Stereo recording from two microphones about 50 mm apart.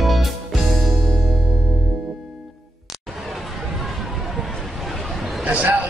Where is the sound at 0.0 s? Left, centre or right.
Centre.